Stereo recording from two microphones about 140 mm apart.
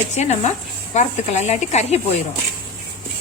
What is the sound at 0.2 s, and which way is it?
Speech, 50° left (ahead or behind).